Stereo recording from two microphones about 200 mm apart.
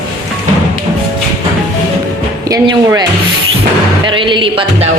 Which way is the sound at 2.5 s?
15° right (ahead or behind).